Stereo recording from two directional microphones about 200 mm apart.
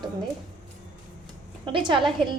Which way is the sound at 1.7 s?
25° right (ahead or behind).